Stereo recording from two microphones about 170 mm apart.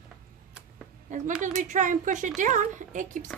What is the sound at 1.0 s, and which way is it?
A woman's voice, 45° right (ahead or behind).